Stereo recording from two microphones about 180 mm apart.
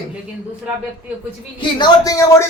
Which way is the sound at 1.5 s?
20° left (ahead or behind).